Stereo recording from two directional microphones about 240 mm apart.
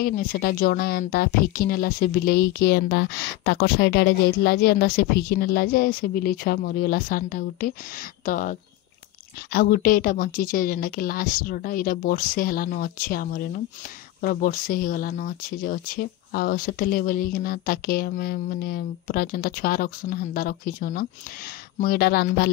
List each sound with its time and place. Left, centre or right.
0.0 s speech: left